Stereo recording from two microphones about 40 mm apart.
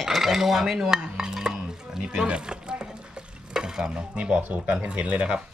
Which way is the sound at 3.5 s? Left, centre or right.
Centre.